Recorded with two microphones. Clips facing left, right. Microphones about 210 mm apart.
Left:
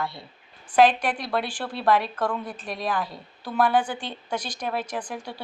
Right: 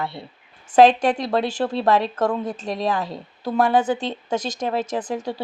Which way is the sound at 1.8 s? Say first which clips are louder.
Right 2 dB; 25° right (ahead or behind).